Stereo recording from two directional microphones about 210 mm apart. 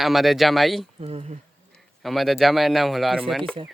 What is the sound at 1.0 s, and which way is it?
Speech, 30° right (ahead or behind).